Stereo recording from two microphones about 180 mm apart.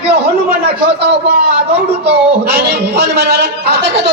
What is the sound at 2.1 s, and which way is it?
A man's voice, 65° right (ahead or behind).